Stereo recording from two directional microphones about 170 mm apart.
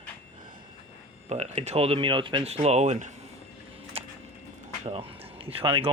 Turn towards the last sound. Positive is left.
turn(degrees=-35)  # may be behind; listen again after turning